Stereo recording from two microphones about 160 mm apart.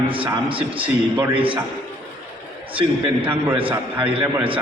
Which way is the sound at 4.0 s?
35° right (ahead or behind).